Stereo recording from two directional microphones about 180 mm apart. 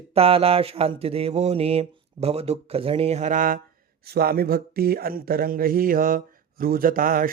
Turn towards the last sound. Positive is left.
turn(degrees=-50)  # may be behind; listen again after turning